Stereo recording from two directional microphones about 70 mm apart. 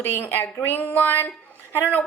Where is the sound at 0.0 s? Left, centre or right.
Left.